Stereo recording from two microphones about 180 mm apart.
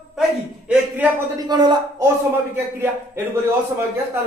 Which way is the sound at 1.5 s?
25° right (ahead or behind).